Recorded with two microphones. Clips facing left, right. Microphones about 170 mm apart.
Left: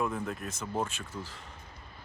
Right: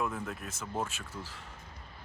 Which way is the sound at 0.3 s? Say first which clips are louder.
Left 3 dB; 5° right (ahead or behind).